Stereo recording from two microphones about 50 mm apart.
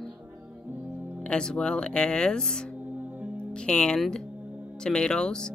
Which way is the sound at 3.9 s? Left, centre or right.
Centre.